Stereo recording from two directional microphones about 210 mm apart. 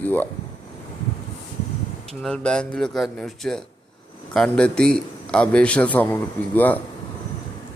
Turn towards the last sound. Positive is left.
turn(degrees=10)  # may be behind; listen again after turning